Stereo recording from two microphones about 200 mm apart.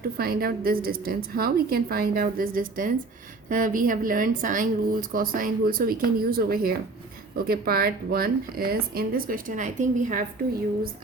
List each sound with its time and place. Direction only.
0.0 s speech: 50° right (ahead or behind)